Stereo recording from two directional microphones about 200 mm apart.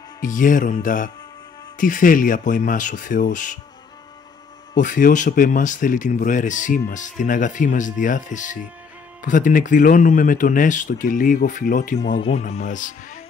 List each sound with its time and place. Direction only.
0.2 s speech: 40° left (ahead or behind)
4.7 s speech: 40° left (ahead or behind)